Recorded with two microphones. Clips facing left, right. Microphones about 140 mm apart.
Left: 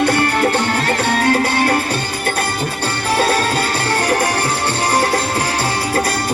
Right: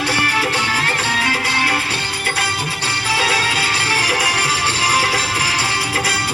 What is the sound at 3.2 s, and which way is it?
Music, 50° left (ahead or behind).